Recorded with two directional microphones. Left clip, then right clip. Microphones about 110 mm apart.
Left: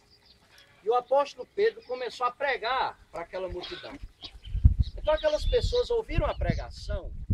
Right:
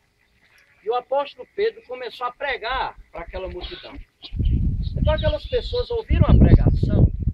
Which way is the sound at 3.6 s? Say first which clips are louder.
Right 3 dB; centre (ahead or behind).